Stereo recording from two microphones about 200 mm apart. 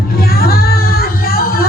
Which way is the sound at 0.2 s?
50° left (ahead or behind).